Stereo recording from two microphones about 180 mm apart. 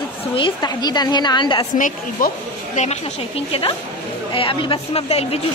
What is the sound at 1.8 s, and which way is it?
A woman's voice, 45° left (ahead or behind).